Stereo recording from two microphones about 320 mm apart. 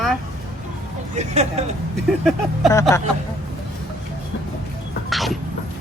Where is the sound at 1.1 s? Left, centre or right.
Centre.